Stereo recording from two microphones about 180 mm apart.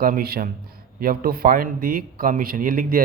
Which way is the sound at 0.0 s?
55° right (ahead or behind).